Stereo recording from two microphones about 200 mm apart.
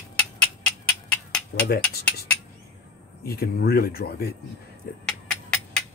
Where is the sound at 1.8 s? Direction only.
10° left (ahead or behind).